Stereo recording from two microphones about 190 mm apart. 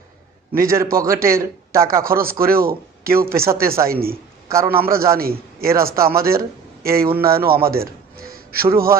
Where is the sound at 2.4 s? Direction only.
50° right (ahead or behind).